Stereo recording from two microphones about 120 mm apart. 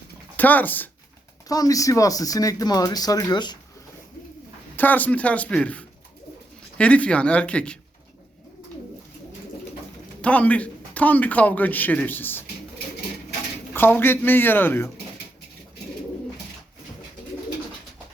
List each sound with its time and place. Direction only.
0.3 s a man's voice: 15° left (ahead or behind)
1.5 s speech: 30° left (ahead or behind)
4.8 s a man's voice: 15° left (ahead or behind)
10.2 s a man's voice: 10° left (ahead or behind)
13.7 s a man's voice: 15° left (ahead or behind)